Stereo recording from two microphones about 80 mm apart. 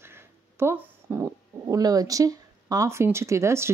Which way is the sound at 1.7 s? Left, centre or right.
Right.